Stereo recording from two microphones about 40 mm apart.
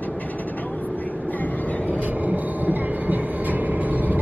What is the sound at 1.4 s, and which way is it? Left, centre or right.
Vehicle, left.